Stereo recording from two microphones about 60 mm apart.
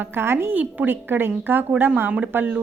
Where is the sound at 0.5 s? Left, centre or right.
Right.